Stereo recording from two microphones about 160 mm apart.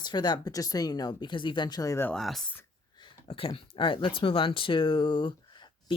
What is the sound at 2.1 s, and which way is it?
Speech, centre (ahead or behind).